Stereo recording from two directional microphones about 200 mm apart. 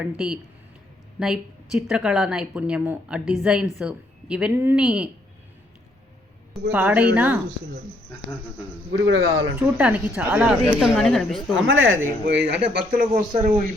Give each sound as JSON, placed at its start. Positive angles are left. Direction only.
{"t": 0.0, "sound": "speech", "side_deg": -5}
{"t": 6.5, "sound": "a woman's voice", "side_deg": -10}
{"t": 8.9, "sound": "a man's voice", "side_deg": -75}
{"t": 9.6, "sound": "a woman's voice", "side_deg": -5}
{"t": 11.5, "sound": "speech", "side_deg": -75}
{"t": 12.3, "sound": "speech", "side_deg": -60}
{"t": 12.6, "sound": "speech", "side_deg": -50}